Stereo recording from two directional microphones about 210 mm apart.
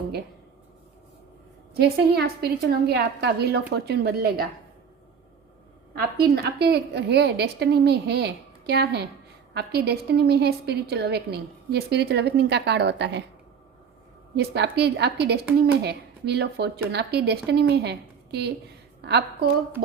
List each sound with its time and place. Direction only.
1.7 s a woman's voice: 50° right (ahead or behind)
5.9 s a woman's voice: 50° right (ahead or behind)
14.3 s a woman's voice: 55° right (ahead or behind)